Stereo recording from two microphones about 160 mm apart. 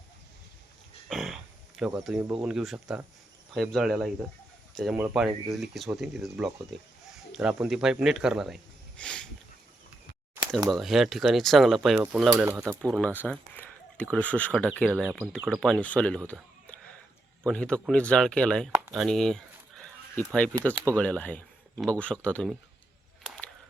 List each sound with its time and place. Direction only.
1.0 s a sound: centre (ahead or behind)
2.3 s speech: 5° right (ahead or behind)
9.0 s a sound: 5° left (ahead or behind)
10.7 s speech: centre (ahead or behind)
12.5 s speech: 15° right (ahead or behind)
13.0 s speech: 10° left (ahead or behind)
18.9 s fowl: 5° left (ahead or behind)
20.7 s speech: 10° left (ahead or behind)
23.2 s a sound: centre (ahead or behind)